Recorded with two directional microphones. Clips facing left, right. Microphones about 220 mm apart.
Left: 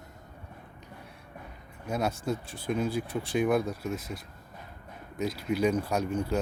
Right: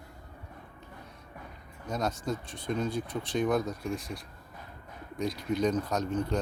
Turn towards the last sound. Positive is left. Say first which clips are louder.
# left 1 dB
turn(degrees=10)  # may be behind; listen again after turning